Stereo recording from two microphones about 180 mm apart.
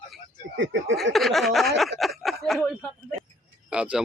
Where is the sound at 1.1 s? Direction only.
Centre (ahead or behind).